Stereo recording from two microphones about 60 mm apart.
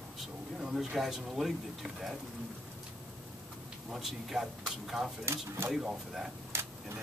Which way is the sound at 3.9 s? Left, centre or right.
Centre.